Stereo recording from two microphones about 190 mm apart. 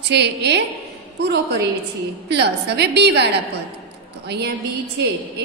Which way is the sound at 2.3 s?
65° right (ahead or behind).